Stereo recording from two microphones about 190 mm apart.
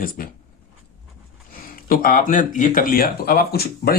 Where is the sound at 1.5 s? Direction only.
50° left (ahead or behind).